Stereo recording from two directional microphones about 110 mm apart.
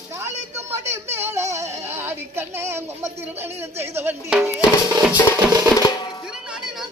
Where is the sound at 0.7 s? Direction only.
20° right (ahead or behind).